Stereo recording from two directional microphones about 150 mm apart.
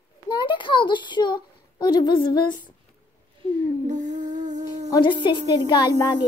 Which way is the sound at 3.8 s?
55° right (ahead or behind).